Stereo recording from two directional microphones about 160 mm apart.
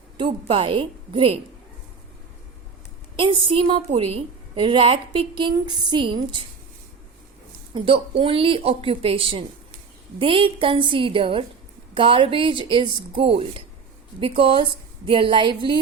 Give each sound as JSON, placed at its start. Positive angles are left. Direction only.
{"t": 0.2, "sound": "a woman's voice", "side_deg": -35}
{"t": 3.2, "sound": "a woman's voice", "side_deg": -35}
{"t": 7.7, "sound": "a woman's voice", "side_deg": -35}